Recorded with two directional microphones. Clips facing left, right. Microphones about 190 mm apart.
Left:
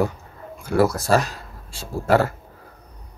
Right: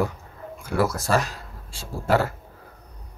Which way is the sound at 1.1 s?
35° left (ahead or behind).